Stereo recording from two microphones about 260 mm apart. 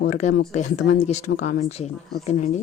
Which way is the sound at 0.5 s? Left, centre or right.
Left.